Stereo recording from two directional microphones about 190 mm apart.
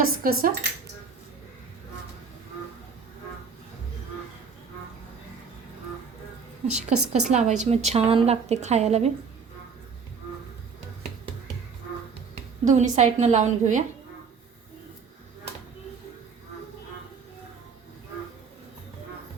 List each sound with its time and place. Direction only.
0.2 s cutlery: 50° right (ahead or behind)
6.7 s a woman's voice: 35° right (ahead or behind)
12.3 s speech: 40° right (ahead or behind)